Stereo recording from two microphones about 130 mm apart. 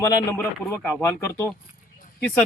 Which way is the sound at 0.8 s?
10° left (ahead or behind).